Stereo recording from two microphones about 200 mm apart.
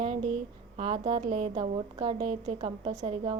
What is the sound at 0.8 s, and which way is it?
A woman's voice, 25° right (ahead or behind).